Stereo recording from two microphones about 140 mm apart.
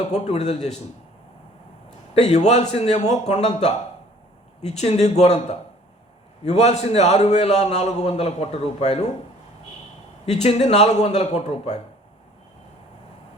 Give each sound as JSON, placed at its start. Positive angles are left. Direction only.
{"t": 0.0, "sound": "a man's voice", "side_deg": 50}
{"t": 2.1, "sound": "a man's voice", "side_deg": 50}
{"t": 10.4, "sound": "a man's voice", "side_deg": 50}